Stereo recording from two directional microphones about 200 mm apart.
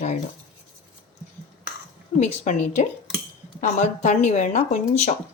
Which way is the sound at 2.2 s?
35° left (ahead or behind).